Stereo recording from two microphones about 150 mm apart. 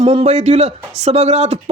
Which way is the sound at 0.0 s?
40° right (ahead or behind).